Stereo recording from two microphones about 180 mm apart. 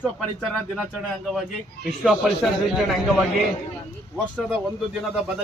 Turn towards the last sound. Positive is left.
turn(degrees=-5)  # may be behind; listen again after turning